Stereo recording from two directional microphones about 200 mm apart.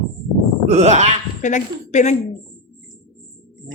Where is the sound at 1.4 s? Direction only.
35° left (ahead or behind).